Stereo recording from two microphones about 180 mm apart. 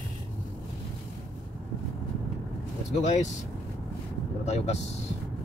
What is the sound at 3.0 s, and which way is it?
Speech, 40° left (ahead or behind).